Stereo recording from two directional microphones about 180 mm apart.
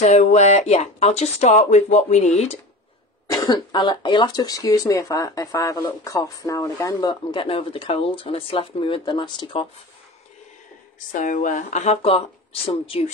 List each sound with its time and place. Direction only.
0.0 s speech: 40° left (ahead or behind)
3.3 s speech: 25° left (ahead or behind)
11.1 s speech: 45° left (ahead or behind)